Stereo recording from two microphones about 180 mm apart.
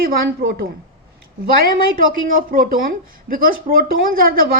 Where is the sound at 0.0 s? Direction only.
55° right (ahead or behind).